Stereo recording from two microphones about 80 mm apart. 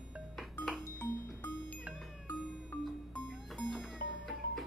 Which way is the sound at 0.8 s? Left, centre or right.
Left.